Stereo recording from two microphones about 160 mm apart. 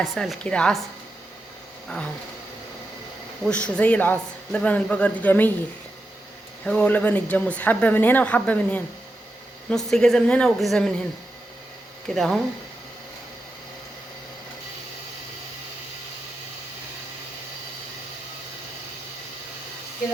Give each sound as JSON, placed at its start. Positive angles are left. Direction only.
{"t": 0.0, "sound": "a woman's voice", "side_deg": 0}
{"t": 3.4, "sound": "speech", "side_deg": 5}
{"t": 6.7, "sound": "a woman's voice", "side_deg": 10}
{"t": 12.0, "sound": "a woman's voice", "side_deg": 0}